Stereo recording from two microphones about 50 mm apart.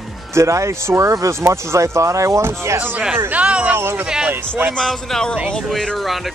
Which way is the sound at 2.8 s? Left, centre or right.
Right.